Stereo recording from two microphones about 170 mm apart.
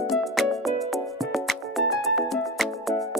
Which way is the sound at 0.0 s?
Centre (ahead or behind).